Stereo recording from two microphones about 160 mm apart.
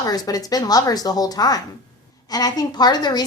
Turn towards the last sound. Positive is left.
turn(degrees=25)  # may be behind; listen again after turning